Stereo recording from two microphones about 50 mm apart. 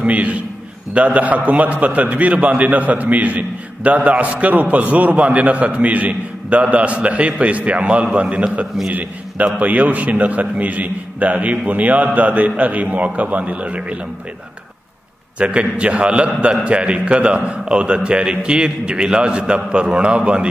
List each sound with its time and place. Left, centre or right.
0.0 s a man's voice: right
15.3 s a man's voice: right